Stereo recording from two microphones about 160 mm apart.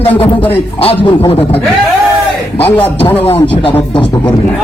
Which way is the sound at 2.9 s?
10° left (ahead or behind).